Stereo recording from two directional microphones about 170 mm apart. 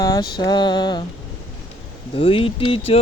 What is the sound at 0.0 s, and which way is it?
Mantra, 25° left (ahead or behind).